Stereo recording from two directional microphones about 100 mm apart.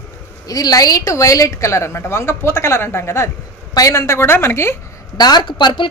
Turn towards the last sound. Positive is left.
turn(degrees=50)  # may be behind; listen again after turning